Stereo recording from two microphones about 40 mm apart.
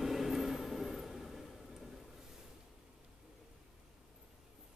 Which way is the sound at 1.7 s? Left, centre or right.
Centre.